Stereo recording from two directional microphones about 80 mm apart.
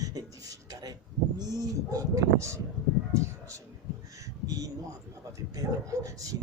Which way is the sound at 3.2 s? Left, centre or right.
Right.